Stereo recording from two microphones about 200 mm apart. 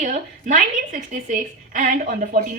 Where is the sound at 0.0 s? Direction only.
40° right (ahead or behind).